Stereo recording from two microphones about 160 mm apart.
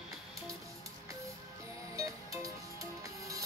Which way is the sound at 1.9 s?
20° right (ahead or behind).